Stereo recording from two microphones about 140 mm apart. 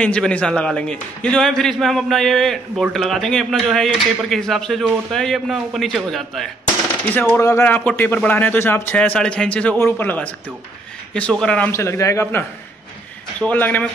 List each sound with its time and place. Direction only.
0.0 s a man's voice: 5° left (ahead or behind)
7.3 s a man's voice: 20° left (ahead or behind)
11.7 s a man's voice: 20° left (ahead or behind)